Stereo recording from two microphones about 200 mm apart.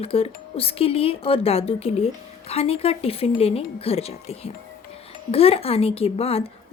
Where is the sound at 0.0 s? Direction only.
30° left (ahead or behind).